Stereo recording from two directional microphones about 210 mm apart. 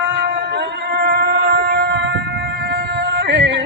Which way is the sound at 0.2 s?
55° right (ahead or behind).